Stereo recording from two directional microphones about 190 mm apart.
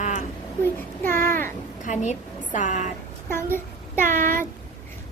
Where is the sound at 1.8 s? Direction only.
40° left (ahead or behind).